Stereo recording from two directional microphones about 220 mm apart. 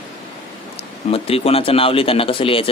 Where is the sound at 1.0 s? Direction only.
25° left (ahead or behind).